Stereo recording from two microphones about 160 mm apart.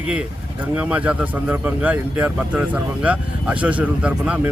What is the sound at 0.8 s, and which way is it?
Speech, 10° right (ahead or behind).